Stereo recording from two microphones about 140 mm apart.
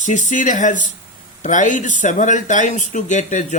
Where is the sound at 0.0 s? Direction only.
60° left (ahead or behind).